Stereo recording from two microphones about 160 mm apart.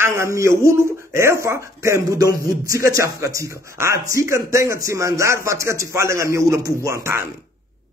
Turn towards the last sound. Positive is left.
turn(degrees=-15)  # may be behind; listen again after turning